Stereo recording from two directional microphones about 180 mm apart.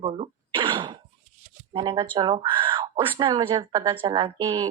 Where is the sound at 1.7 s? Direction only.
25° right (ahead or behind).